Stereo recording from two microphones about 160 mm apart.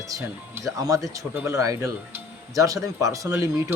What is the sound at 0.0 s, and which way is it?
Speech, 20° right (ahead or behind).